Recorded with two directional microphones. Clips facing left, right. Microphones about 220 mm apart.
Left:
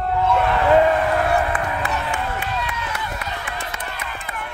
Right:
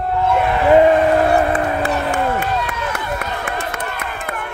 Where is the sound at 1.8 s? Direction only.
35° right (ahead or behind); by 4.5 s 55° right (ahead or behind).